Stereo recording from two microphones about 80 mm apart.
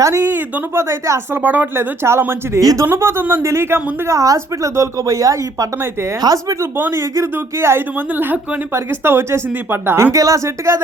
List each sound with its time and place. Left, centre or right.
0.0 s speech: right
0.3 s speech: right
1.4 s speech: right
2.6 s a woman's voice: right
2.8 s a woman's voice: right
6.7 s speech: right
10.1 s speech: right